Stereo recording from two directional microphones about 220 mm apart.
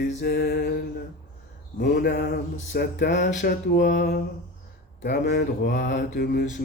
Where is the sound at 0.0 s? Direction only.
40° left (ahead or behind).